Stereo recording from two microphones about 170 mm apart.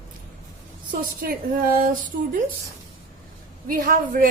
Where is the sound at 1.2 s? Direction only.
60° right (ahead or behind).